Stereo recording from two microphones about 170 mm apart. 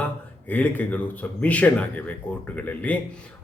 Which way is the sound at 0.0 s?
10° left (ahead or behind).